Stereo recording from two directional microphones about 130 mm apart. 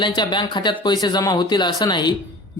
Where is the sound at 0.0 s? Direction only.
35° left (ahead or behind).